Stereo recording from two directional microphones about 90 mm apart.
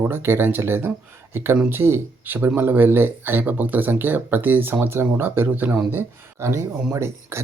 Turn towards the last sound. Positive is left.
turn(degrees=-30)  # may be behind; listen again after turning